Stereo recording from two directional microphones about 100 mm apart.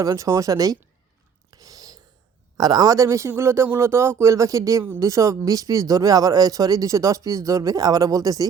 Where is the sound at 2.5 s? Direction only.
40° right (ahead or behind).